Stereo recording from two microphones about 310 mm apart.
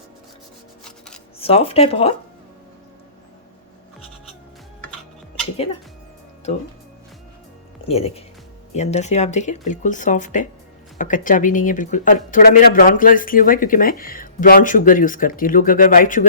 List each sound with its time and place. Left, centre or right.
0.9 s a sound: centre
1.4 s speech: centre
7.9 s speech: centre